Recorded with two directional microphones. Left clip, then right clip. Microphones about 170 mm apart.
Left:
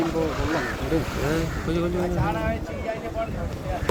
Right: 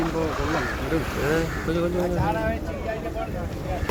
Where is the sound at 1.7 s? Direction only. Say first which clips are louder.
Right 1 dB; 50° left (ahead or behind).